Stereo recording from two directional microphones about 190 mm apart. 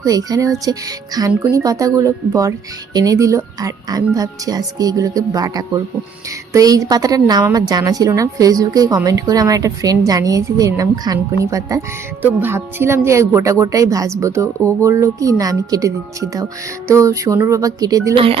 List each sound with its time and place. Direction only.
0.0 s a woman's voice: 20° right (ahead or behind)
18.1 s a woman's voice: 30° right (ahead or behind)